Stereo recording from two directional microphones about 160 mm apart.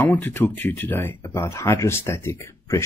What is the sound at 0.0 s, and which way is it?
Speech, 10° left (ahead or behind).